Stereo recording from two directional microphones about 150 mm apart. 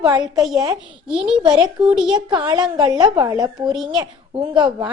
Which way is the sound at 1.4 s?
30° right (ahead or behind).